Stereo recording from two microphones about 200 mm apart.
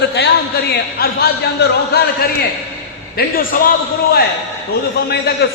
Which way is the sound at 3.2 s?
50° left (ahead or behind).